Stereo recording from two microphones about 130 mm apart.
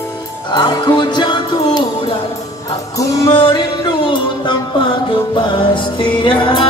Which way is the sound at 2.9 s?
25° left (ahead or behind).